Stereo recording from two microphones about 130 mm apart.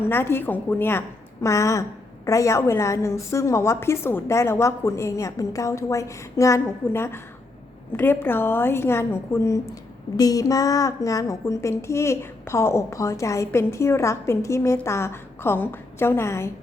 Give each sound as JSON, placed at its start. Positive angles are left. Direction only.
{"t": 0.1, "sound": "a woman's voice", "side_deg": 15}